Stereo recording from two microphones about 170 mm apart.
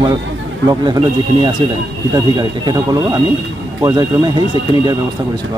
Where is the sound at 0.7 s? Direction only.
25° right (ahead or behind).